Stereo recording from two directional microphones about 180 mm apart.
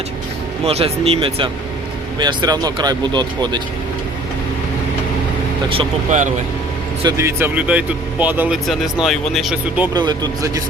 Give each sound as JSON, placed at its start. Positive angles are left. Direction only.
{"t": 0.6, "sound": "speech", "side_deg": -35}
{"t": 6.1, "sound": "speech", "side_deg": -45}
{"t": 7.0, "sound": "speech", "side_deg": -15}
{"t": 9.9, "sound": "speech", "side_deg": -20}